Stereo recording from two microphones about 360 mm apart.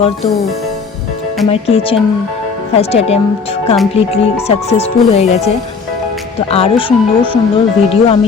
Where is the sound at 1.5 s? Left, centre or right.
Centre.